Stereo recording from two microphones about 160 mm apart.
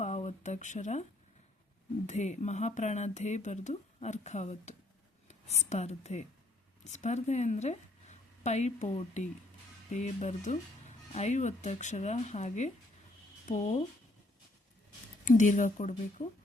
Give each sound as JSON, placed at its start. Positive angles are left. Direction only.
{"t": 0.0, "sound": "a sound", "side_deg": 45}
{"t": 2.0, "sound": "a woman's voice", "side_deg": 45}
{"t": 15.2, "sound": "speech", "side_deg": 50}